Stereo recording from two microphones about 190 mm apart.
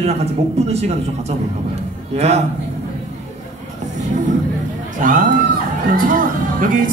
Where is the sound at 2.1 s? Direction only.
35° right (ahead or behind).